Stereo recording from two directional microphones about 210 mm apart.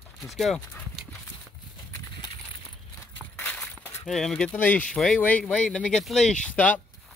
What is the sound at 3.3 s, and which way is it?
Walk, 10° left (ahead or behind).